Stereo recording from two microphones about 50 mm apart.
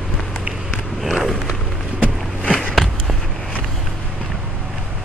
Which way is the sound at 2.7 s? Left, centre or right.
Centre.